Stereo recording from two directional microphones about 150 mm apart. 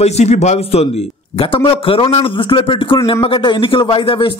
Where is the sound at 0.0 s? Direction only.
45° left (ahead or behind).